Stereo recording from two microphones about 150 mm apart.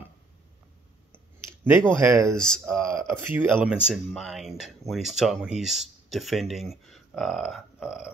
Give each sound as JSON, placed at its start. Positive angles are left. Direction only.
{"t": 1.1, "sound": "clicking", "side_deg": -15}
{"t": 2.0, "sound": "speech", "side_deg": -20}